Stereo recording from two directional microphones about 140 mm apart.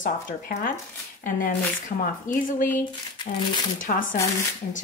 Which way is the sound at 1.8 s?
80° left.